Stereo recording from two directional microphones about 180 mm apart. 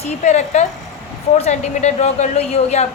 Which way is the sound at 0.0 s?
35° left (ahead or behind).